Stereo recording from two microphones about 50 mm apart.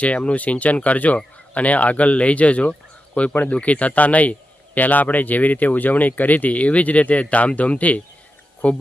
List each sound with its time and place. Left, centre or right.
0.0 s a man's voice: left